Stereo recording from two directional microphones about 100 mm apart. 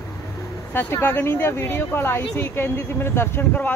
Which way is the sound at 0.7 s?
20° left (ahead or behind).